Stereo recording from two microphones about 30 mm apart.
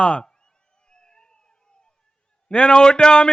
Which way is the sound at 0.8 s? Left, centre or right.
Left.